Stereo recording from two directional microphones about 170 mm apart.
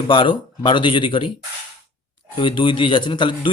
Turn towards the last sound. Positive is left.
turn(degrees=25)  # may be behind; listen again after turning